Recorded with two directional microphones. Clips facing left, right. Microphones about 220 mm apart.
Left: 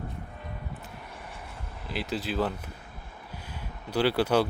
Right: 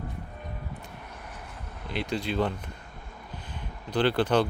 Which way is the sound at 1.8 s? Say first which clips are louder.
Right 2 dB; 5° left (ahead or behind).